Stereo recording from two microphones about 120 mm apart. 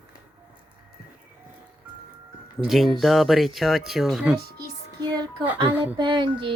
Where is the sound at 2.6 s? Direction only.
Centre (ahead or behind).